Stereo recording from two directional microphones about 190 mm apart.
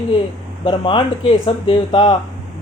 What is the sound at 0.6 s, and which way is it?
Speech, 25° left (ahead or behind).